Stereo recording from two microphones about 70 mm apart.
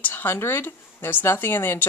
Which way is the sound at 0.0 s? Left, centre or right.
Left.